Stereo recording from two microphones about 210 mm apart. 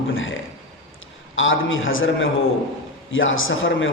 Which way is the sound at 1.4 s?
65° left (ahead or behind).